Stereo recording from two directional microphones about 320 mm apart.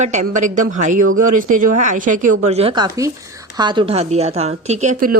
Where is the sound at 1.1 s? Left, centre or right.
Right.